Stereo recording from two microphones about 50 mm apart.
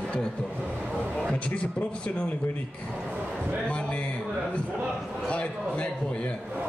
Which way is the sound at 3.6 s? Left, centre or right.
Left.